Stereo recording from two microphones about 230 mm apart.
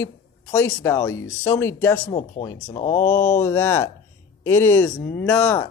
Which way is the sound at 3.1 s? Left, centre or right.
Centre.